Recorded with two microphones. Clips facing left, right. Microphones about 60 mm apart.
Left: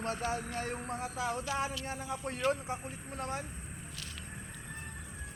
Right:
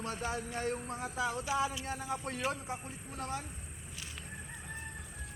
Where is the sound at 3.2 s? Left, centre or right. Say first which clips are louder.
Left 1 dB; left.